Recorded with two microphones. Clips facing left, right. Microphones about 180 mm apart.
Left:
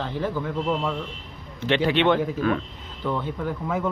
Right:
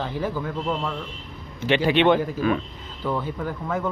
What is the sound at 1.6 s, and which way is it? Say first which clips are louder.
Speech: right 2 dB; 10° right (ahead or behind).